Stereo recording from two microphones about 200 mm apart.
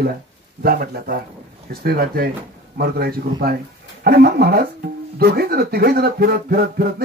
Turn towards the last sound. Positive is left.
turn(degrees=-50)  # may be behind; listen again after turning